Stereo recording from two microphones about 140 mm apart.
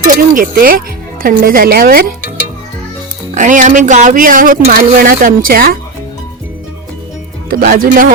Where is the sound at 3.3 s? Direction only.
65° right (ahead or behind); by 5.7 s 90° right.